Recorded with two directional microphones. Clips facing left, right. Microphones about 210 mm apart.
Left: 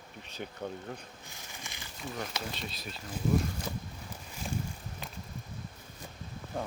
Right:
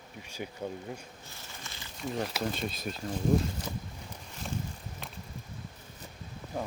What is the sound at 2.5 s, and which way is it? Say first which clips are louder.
Speech: right 6 dB; 50° right (ahead or behind).